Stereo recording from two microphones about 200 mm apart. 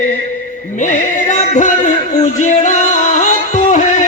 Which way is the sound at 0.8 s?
40° left (ahead or behind).